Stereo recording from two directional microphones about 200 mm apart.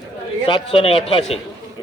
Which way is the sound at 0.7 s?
30° left (ahead or behind).